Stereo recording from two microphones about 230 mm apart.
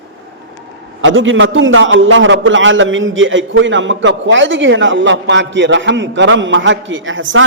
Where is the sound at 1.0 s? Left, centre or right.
Right.